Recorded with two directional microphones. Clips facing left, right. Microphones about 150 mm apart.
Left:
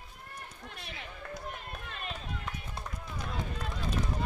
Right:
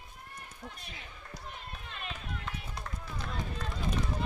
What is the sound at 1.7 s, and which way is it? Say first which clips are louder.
Run: left 2 dB; 45° left (ahead or behind).